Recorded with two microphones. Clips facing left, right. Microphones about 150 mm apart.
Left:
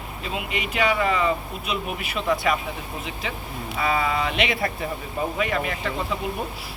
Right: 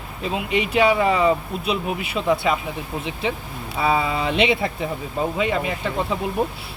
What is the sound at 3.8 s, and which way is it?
Speech, 25° right (ahead or behind).